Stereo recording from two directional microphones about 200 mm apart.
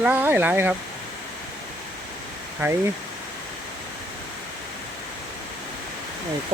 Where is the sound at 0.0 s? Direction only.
10° right (ahead or behind).